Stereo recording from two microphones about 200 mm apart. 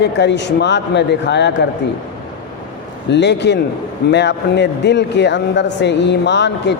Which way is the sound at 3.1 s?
60° left (ahead or behind).